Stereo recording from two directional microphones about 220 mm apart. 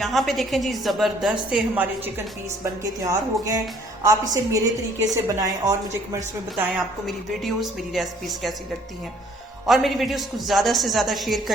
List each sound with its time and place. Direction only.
0.0 s a woman's voice: centre (ahead or behind)
6.7 s a woman's voice: centre (ahead or behind)
9.6 s a woman's voice: centre (ahead or behind)